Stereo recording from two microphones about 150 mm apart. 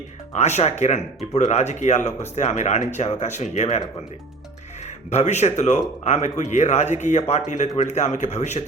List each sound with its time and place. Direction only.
0.3 s speech: 45° left (ahead or behind)
5.1 s speech: 50° left (ahead or behind)